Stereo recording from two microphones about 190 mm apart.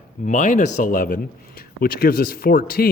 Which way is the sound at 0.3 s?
40° left (ahead or behind).